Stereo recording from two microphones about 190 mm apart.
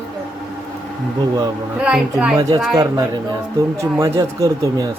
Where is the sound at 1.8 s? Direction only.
5° right (ahead or behind).